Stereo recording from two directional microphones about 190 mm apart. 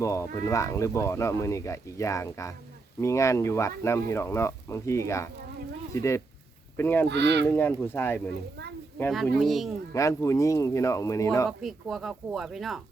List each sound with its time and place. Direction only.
0.0 s speech: 15° left (ahead or behind)
7.1 s speech: 65° right (ahead or behind)
7.5 s speech: 10° left (ahead or behind)
9.9 s speech: 15° left (ahead or behind)
11.4 s speech: centre (ahead or behind)